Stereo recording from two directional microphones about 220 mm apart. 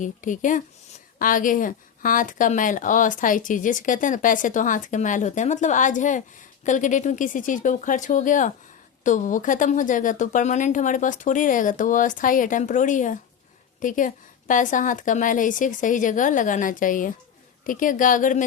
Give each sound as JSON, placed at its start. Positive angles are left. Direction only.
{"t": 0.0, "sound": "speech", "side_deg": 35}